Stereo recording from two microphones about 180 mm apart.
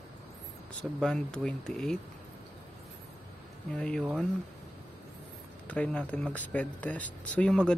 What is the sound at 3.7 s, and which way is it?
Speech, 5° left (ahead or behind).